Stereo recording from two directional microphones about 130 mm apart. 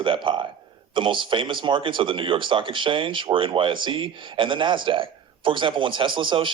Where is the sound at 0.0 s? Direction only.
40° right (ahead or behind).